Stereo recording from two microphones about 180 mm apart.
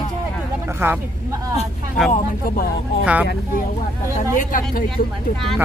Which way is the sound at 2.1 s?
50° left (ahead or behind).